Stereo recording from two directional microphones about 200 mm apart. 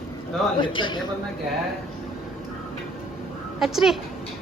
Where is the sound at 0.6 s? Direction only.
25° left (ahead or behind).